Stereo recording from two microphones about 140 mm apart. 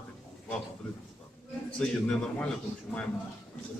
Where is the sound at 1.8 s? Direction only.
5° left (ahead or behind).